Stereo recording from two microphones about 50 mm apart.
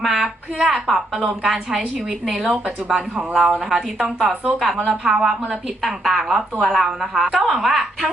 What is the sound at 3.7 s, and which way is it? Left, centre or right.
Speech, centre.